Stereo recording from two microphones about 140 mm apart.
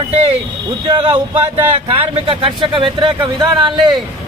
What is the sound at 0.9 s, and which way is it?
Speech, 35° right (ahead or behind).